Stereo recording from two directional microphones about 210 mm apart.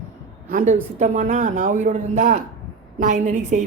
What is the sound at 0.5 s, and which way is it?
Speech, 40° right (ahead or behind).